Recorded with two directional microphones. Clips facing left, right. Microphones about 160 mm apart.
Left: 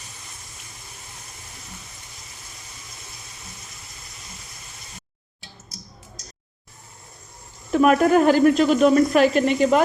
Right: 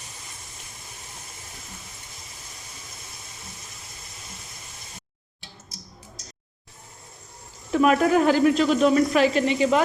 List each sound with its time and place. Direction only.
7.7 s speech: 50° left (ahead or behind)